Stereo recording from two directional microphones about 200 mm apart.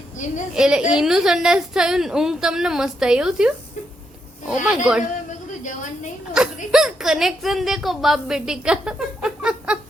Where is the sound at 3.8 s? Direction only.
40° left (ahead or behind).